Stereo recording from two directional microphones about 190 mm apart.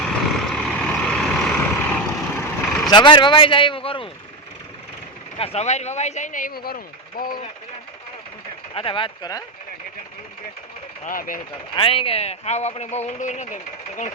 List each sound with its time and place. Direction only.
0.0 s vehicle: centre (ahead or behind)
2.9 s speech: 25° left (ahead or behind)
5.4 s speech: 35° left (ahead or behind); by 7.3 s 50° left (ahead or behind)
8.7 s speech: 30° left (ahead or behind)
11.0 s speech: 45° left (ahead or behind)
11.7 s speech: 30° left (ahead or behind)